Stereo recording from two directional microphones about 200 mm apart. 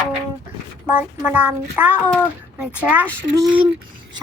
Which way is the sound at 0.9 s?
10° right (ahead or behind).